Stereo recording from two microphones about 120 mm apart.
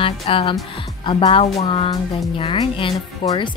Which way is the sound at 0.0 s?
50° left (ahead or behind).